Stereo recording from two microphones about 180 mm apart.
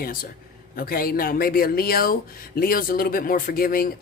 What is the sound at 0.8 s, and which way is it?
A man's voice, 55° left (ahead or behind).